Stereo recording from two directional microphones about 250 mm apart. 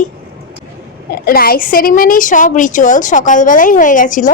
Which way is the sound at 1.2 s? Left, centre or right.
Left.